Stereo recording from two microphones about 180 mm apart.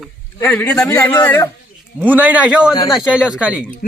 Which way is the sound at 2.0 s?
10° right (ahead or behind).